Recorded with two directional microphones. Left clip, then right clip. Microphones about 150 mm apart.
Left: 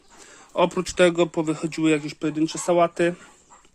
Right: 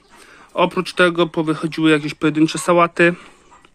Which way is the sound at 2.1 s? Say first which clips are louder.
Right 8 dB; 20° right (ahead or behind).